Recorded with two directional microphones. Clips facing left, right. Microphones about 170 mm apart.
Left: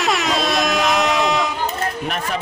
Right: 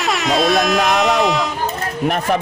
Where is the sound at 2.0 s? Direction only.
60° right (ahead or behind).